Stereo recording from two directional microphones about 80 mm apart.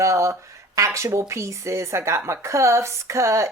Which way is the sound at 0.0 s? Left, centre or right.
Right.